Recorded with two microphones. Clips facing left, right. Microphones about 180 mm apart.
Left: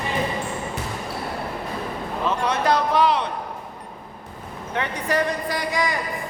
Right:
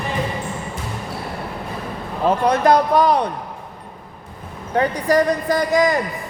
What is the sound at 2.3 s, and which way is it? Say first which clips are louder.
A woman's voice: right 7 dB; 40° right (ahead or behind).